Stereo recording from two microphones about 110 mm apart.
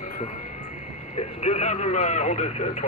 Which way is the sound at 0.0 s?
90° left.